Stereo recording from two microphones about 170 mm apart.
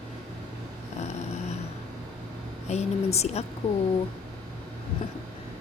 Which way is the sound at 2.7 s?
40° left (ahead or behind).